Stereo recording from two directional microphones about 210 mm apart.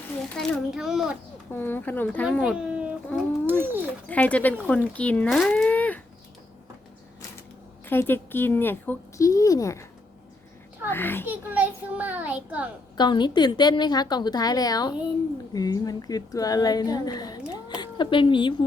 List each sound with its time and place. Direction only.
0.3 s a child's voice: centre (ahead or behind)
1.5 s a woman's voice: 10° left (ahead or behind)
2.2 s a child's voice: centre (ahead or behind)
4.1 s a woman's voice: 5° left (ahead or behind)
7.9 s a woman's voice: 10° left (ahead or behind)
10.8 s a woman's voice: 10° left (ahead or behind)
11.3 s a child's voice: 10° right (ahead or behind)
13.0 s a woman's voice: 20° left (ahead or behind)